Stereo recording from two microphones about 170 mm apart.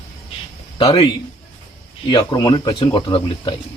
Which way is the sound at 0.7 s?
30° left (ahead or behind).